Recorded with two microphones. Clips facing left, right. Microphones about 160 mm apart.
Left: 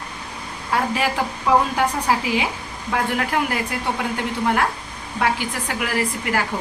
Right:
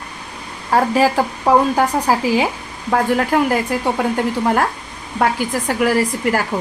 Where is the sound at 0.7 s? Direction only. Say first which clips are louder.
Right 7 dB; 40° right (ahead or behind).